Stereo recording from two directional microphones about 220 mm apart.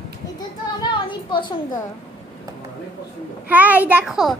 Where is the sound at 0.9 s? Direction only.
20° left (ahead or behind).